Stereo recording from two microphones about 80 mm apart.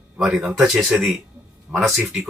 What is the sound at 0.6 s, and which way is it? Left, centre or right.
Speech, centre.